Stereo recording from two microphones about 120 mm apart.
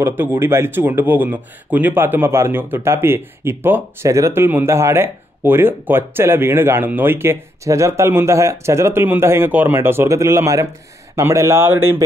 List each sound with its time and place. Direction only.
0.0 s speech: 20° right (ahead or behind)